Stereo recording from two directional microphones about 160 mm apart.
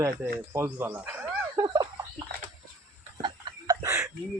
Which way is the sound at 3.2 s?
25° right (ahead or behind).